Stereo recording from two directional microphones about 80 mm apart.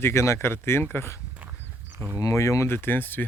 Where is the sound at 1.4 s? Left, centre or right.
Right.